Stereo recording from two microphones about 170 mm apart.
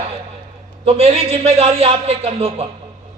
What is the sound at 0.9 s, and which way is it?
A man's voice, 35° right (ahead or behind).